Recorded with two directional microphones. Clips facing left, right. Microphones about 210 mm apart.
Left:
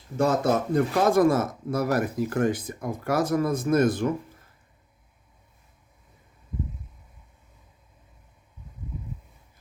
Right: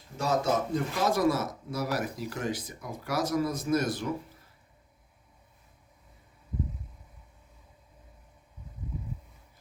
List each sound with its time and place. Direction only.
0.2 s speech: 55° left (ahead or behind)